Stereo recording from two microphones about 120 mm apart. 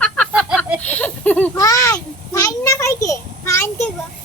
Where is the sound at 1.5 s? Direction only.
25° left (ahead or behind).